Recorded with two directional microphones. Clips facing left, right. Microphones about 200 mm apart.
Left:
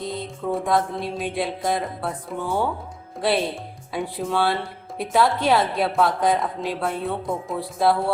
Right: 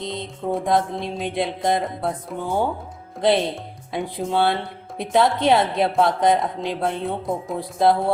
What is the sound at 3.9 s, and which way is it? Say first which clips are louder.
A woman's voice: right 2 dB; 20° right (ahead or behind).